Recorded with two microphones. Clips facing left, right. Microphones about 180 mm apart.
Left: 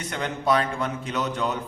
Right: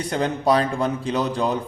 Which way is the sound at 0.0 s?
35° right (ahead or behind).